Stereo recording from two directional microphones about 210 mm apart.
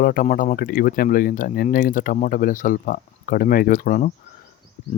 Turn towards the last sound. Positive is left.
turn(degrees=40)  # may be behind; listen again after turning